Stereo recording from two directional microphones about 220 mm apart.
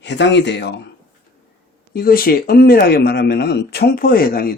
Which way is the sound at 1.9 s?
40° left (ahead or behind).